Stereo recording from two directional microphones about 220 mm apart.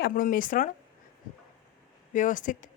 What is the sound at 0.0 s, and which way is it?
Speech, 40° left (ahead or behind).